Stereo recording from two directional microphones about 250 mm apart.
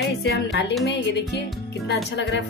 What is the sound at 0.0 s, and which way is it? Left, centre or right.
Speech, left.